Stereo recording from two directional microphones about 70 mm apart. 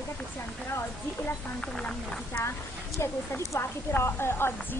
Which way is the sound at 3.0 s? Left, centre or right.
Left.